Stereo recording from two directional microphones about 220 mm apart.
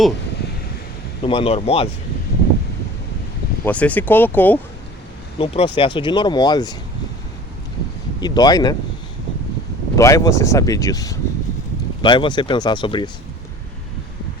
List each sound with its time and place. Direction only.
1.2 s speech: 25° left (ahead or behind)
3.6 s speech: 5° left (ahead or behind)
5.4 s speech: 25° left (ahead or behind)
8.2 s speech: 20° left (ahead or behind)
9.9 s speech: 15° left (ahead or behind)